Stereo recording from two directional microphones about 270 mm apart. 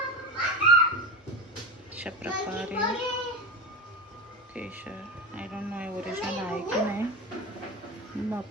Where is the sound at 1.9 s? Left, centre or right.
Centre.